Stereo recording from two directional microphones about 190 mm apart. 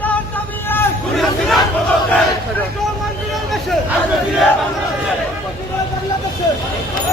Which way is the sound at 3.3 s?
Centre (ahead or behind).